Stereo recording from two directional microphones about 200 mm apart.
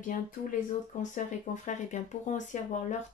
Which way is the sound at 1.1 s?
40° left (ahead or behind).